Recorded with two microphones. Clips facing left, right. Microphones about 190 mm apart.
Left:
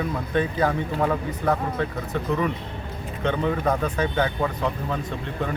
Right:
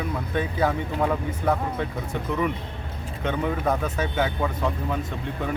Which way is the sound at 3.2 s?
10° right (ahead or behind).